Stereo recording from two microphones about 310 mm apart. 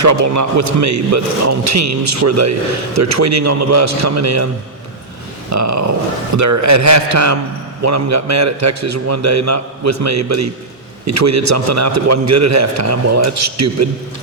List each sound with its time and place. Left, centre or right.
0.0 s a man's voice: right
5.5 s a man's voice: right